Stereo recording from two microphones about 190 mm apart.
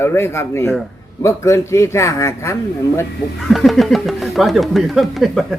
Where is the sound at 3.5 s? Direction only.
Centre (ahead or behind).